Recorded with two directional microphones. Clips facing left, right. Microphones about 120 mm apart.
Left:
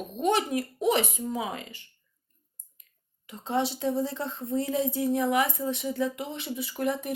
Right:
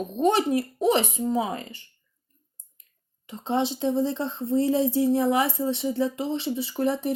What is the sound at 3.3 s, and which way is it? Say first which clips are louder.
Speech: right 3 dB; 25° right (ahead or behind).